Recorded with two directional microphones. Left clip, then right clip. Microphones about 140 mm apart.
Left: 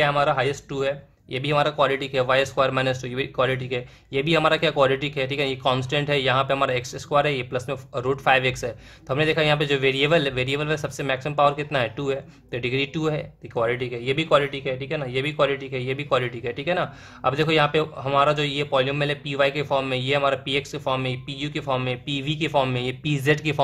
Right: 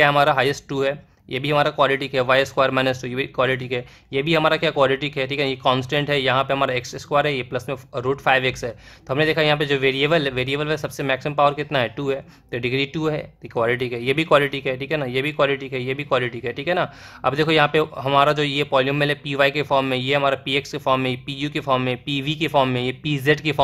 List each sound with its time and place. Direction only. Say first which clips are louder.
0.0 s speech: right 4 dB; 30° right (ahead or behind)